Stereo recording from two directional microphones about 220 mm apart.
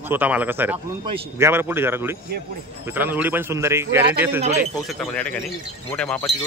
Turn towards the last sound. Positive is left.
turn(degrees=5)  # may be behind; listen again after turning